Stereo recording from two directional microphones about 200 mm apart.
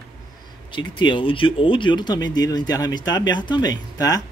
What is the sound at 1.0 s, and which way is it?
Speech, 25° left (ahead or behind).